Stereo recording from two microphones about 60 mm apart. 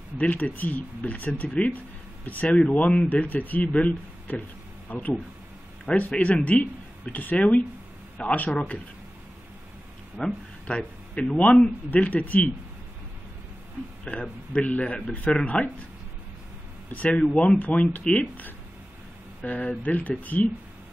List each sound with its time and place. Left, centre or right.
0.2 s speech: left
10.2 s speech: centre
14.2 s speech: left
16.9 s speech: left
19.4 s speech: left